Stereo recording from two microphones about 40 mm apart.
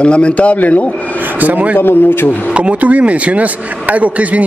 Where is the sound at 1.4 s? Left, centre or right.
Right.